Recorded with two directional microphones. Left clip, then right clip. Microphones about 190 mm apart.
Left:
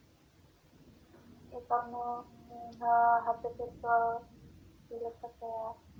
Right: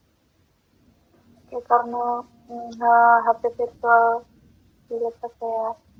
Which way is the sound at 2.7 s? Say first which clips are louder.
Right 12 dB; 60° right (ahead or behind).